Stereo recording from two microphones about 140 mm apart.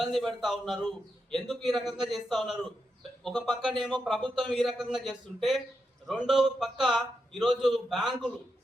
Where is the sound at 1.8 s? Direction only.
30° right (ahead or behind).